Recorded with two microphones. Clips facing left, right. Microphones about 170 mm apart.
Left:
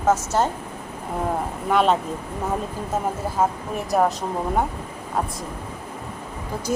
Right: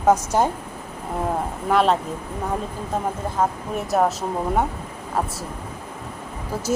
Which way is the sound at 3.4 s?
Centre (ahead or behind).